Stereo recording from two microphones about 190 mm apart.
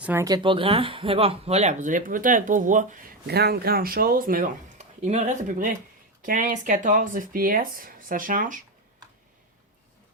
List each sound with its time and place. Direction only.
0.0 s speech: 10° right (ahead or behind); by 8.6 s 45° right (ahead or behind)